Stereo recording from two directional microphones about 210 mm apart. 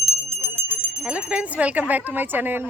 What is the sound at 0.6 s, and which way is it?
Speech, 5° right (ahead or behind).